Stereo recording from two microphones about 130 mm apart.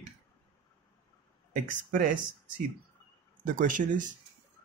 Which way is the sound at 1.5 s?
90° right.